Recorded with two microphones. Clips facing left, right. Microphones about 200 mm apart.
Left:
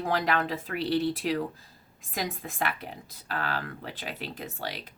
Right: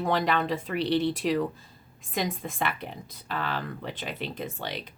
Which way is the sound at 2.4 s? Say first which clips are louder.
Right 1 dB; centre (ahead or behind).